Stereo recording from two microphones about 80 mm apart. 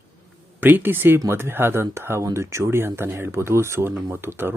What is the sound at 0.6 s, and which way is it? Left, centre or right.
Speech, right.